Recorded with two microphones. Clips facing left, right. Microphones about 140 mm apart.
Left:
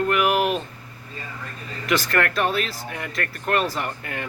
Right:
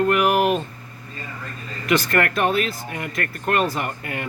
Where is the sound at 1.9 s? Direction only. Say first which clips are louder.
Right 2 dB; 5° right (ahead or behind).